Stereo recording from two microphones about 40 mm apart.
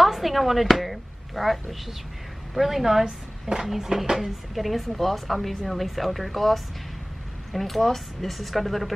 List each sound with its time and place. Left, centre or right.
0.0 s speech: centre